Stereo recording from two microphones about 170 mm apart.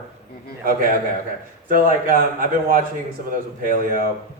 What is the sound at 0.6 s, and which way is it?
A man's voice, 55° right (ahead or behind).